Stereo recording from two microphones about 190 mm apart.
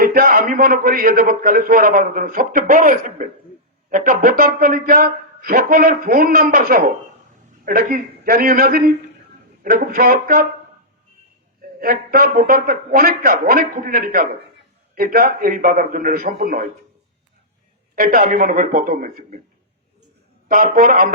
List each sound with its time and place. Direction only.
0.0 s a man's voice: 50° right (ahead or behind)
11.8 s a man's voice: 50° right (ahead or behind)
17.9 s a man's voice: 50° right (ahead or behind)
20.5 s a man's voice: 45° right (ahead or behind)